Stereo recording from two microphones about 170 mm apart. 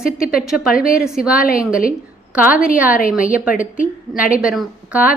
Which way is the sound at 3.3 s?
10° right (ahead or behind).